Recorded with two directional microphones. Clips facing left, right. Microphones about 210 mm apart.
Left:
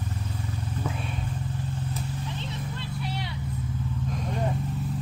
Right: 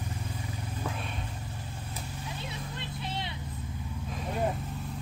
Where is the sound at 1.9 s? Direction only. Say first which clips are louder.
Left 6 dB; 10° right (ahead or behind).